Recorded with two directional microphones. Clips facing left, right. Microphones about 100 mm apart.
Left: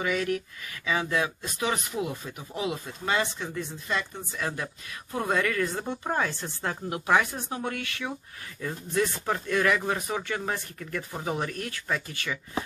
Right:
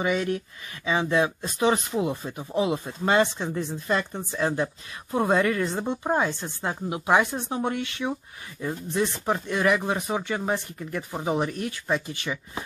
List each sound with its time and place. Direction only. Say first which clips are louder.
0.0 s speech: right 2 dB; 25° right (ahead or behind)